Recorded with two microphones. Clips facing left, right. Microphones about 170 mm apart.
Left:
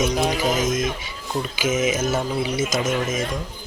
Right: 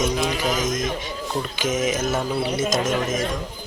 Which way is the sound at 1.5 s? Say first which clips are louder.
Left 2 dB; 5° left (ahead or behind).